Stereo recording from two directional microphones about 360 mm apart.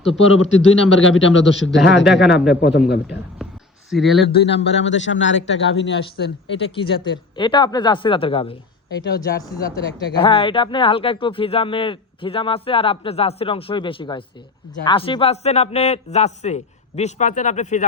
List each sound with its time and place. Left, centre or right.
0.2 s a man's voice: left
3.4 s a sound: centre
3.8 s speech: centre
4.4 s a man's voice: left
6.7 s speech: centre
9.0 s a man's voice: left
10.2 s a man's voice: centre